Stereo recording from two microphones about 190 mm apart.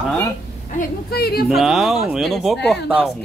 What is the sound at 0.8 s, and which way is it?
Speech, 55° left (ahead or behind).